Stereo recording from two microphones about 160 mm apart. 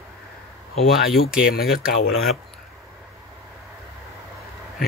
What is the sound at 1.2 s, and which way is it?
Speech, 70° left (ahead or behind).